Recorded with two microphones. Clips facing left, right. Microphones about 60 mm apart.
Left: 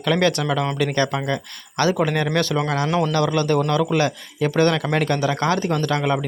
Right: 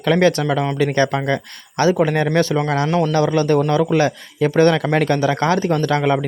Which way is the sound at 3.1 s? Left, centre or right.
Right.